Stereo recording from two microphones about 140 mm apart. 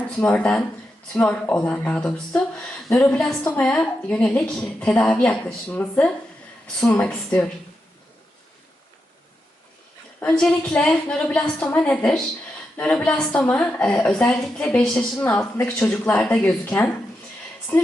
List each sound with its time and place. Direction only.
0.2 s a woman's voice: 10° left (ahead or behind)
2.6 s a sound: 15° left (ahead or behind)
3.1 s a woman's voice: 5° left (ahead or behind)
10.2 s a woman's voice: 10° left (ahead or behind)